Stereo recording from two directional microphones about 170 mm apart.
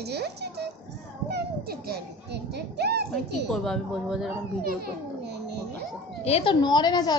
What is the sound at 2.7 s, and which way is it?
Speech, 75° right (ahead or behind).